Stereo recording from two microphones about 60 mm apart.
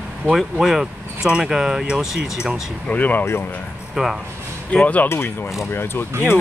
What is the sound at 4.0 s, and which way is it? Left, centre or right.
Speech, centre.